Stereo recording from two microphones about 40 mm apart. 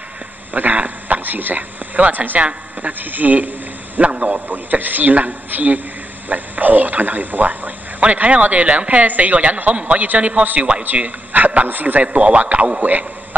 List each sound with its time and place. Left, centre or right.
0.5 s speech: right
2.0 s a man's voice: right
2.9 s a man's voice: right
4.0 s a man's voice: right
4.5 s a man's voice: right
10.4 s a man's voice: right
12.8 s a man's voice: right